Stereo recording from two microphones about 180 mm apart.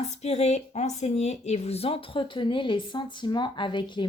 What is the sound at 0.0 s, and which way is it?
A woman's voice, 35° left (ahead or behind).